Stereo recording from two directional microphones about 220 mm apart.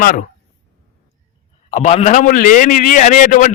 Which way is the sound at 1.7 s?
30° left (ahead or behind).